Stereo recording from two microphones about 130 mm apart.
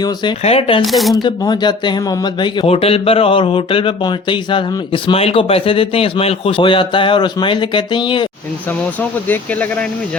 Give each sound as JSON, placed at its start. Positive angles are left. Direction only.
{"t": 0.4, "sound": "speech", "side_deg": 50}
{"t": 0.9, "sound": "speech", "side_deg": 0}
{"t": 1.1, "sound": "speech", "side_deg": 35}
{"t": 2.6, "sound": "speech", "side_deg": 50}